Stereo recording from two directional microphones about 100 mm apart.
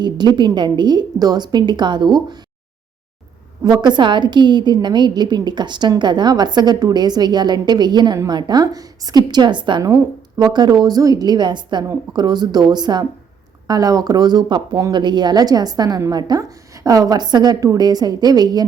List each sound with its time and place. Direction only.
0.0 s a woman's voice: 50° right (ahead or behind)
3.6 s a woman's voice: 45° right (ahead or behind)